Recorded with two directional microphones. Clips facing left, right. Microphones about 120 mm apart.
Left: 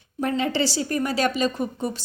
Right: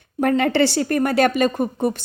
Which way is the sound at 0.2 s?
60° right (ahead or behind).